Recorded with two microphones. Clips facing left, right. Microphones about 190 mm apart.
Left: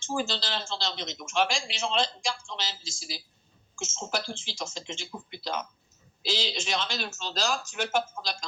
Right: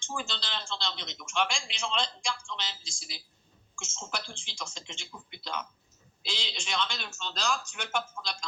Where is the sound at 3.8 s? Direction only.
40° left (ahead or behind).